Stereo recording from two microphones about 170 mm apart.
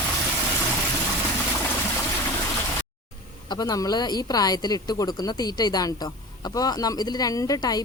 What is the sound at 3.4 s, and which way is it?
A woman's voice, 20° left (ahead or behind).